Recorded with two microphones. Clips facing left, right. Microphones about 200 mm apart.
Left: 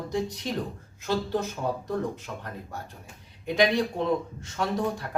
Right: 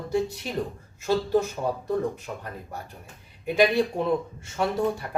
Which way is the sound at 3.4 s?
10° right (ahead or behind).